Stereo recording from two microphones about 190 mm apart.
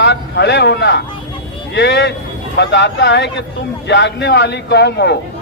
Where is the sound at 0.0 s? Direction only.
65° left (ahead or behind).